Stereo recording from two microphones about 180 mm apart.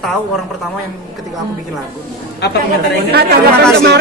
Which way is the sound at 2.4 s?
65° left (ahead or behind).